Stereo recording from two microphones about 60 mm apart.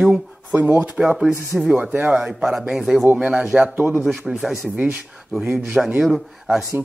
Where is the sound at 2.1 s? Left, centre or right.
Centre.